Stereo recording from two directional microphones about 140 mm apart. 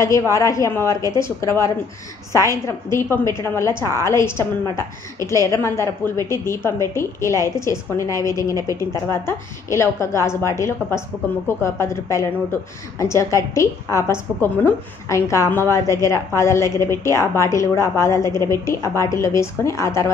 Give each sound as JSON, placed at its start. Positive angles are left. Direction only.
{"t": 0.0, "sound": "a woman's voice", "side_deg": 20}